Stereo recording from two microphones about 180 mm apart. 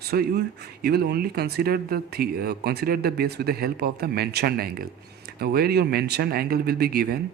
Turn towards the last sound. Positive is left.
turn(degrees=-60)  # may be behind; listen again after turning